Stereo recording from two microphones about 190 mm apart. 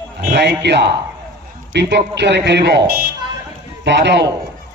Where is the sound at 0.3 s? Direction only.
65° right (ahead or behind).